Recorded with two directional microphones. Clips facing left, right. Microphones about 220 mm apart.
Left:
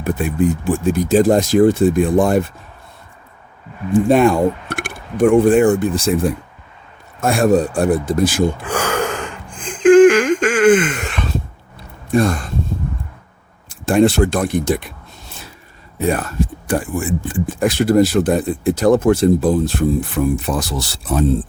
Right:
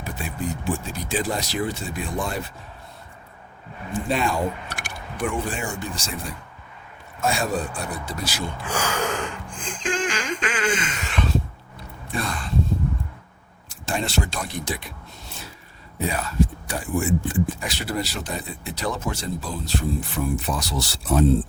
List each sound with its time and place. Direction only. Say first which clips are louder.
0.0 s speech: left 13 dB; 55° left (ahead or behind)
4.1 s speech: left 10 dB; 55° left (ahead or behind)
7.6 s gasp: left 14 dB; 50° left (ahead or behind)
12.1 s speech: left 13 dB; 45° left (ahead or behind)
13.7 s speech: left 15 dB; 55° left (ahead or behind)
16.0 s speech: left 5 dB; 50° left (ahead or behind)